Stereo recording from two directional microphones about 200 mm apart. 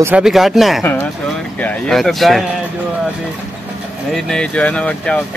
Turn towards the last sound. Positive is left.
turn(degrees=5)  # may be behind; listen again after turning